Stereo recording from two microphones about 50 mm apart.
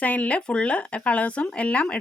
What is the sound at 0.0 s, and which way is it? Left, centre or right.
Speech, left.